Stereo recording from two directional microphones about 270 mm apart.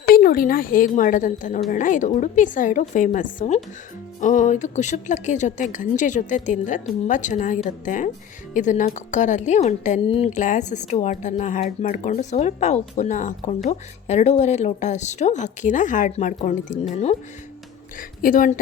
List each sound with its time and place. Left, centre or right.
0.1 s a woman's voice: left
18.2 s a woman's voice: left